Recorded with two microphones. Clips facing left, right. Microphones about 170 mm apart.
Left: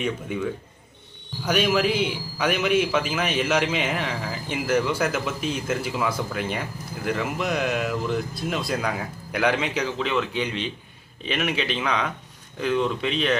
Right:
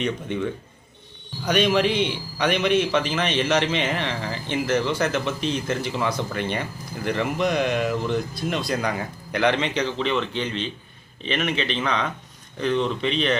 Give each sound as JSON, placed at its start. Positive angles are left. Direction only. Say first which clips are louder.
{"t": 0.0, "sound": "a man's voice", "louder": "right 1 dB", "side_deg": 5}